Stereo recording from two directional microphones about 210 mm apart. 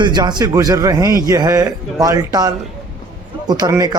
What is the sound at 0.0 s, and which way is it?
A man's voice, 20° right (ahead or behind).